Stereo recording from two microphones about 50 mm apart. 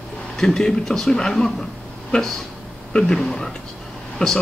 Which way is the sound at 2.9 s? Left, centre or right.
Centre.